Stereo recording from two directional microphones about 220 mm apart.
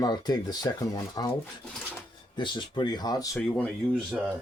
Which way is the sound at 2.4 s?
20° left (ahead or behind).